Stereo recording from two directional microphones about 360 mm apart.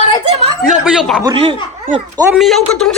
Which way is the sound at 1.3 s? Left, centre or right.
Centre.